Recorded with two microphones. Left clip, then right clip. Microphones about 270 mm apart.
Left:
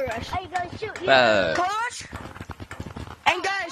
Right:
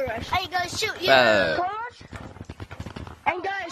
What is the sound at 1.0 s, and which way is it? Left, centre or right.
Speech, centre.